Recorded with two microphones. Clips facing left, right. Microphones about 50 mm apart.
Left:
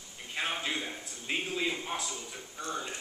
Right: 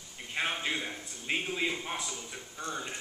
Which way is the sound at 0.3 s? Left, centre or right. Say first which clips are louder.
Right 1 dB; centre.